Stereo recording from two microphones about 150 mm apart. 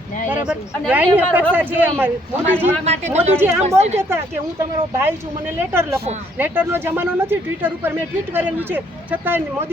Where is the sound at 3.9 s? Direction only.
15° right (ahead or behind).